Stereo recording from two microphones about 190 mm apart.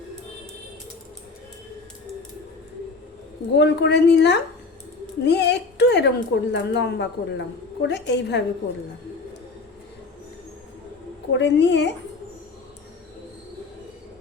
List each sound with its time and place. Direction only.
3.6 s a woman's voice: 65° left (ahead or behind)
11.3 s a woman's voice: 70° left (ahead or behind)